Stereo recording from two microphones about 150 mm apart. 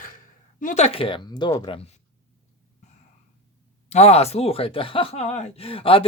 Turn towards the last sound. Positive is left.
turn(degrees=40)  # may be behind; listen again after turning